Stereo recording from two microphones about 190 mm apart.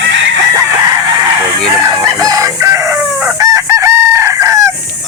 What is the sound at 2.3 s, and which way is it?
Chicken, 20° right (ahead or behind).